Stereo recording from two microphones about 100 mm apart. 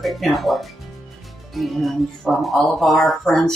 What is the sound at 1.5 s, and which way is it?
Speech, centre (ahead or behind).